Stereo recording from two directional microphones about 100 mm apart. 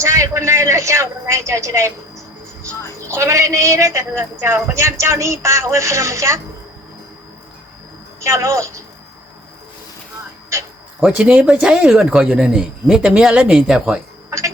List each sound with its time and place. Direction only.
0.0 s a man's voice: 30° right (ahead or behind)
8.2 s a woman's voice: 30° right (ahead or behind)
11.0 s speech: 10° right (ahead or behind)
14.3 s a sound: 30° right (ahead or behind)